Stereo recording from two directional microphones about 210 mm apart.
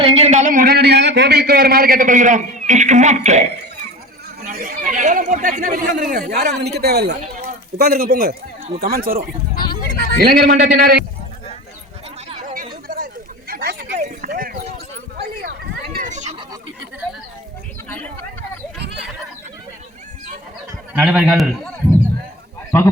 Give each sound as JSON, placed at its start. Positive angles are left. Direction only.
{"t": 0.0, "sound": "a man's voice", "side_deg": -30}
{"t": 4.4, "sound": "a man's voice", "side_deg": -40}
{"t": 12.4, "sound": "chatter", "side_deg": -40}
{"t": 13.5, "sound": "a sound", "side_deg": -45}
{"t": 17.8, "sound": "speech", "side_deg": 10}
{"t": 20.9, "sound": "a man's voice", "side_deg": -5}